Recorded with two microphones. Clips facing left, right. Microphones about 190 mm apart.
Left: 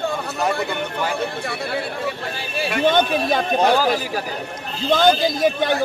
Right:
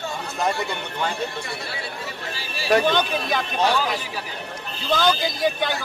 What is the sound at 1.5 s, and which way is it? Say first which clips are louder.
Speech: left 7 dB; 55° left (ahead or behind).